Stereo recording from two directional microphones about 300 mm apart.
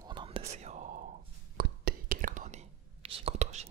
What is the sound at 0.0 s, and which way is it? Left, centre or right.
Whispering, centre.